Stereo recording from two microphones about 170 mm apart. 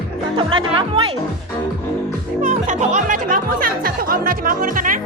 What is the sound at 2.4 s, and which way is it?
Speech, 45° right (ahead or behind).